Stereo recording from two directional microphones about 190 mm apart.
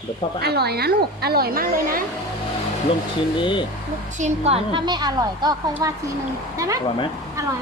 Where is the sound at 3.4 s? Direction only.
25° left (ahead or behind).